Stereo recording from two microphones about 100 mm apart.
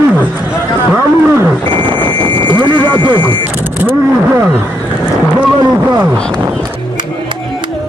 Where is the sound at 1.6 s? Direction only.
50° left (ahead or behind).